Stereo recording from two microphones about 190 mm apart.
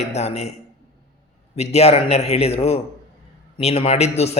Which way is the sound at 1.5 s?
35° left (ahead or behind).